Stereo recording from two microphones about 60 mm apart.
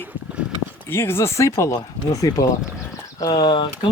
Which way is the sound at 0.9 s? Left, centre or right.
Left.